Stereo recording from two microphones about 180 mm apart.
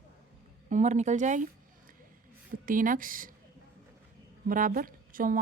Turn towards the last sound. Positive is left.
turn(degrees=-50)  # may be behind; listen again after turning